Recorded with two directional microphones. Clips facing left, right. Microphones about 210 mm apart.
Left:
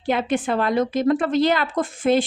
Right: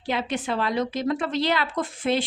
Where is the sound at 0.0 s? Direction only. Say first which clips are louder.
Left 6 dB; 50° left (ahead or behind).